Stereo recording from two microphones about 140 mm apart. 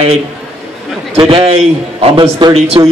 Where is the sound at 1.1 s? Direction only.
40° right (ahead or behind).